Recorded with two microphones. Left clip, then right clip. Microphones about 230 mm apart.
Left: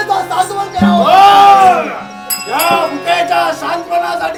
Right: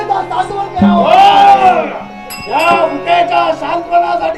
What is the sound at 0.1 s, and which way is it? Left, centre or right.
Music, left.